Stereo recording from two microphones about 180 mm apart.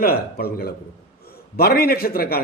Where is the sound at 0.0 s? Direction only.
55° left (ahead or behind).